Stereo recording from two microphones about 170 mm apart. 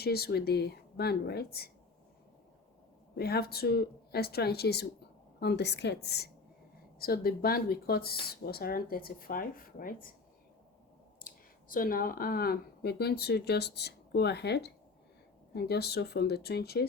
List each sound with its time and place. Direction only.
0.0 s speech: 70° left (ahead or behind)
3.2 s speech: 70° left (ahead or behind)
11.7 s speech: 55° left (ahead or behind)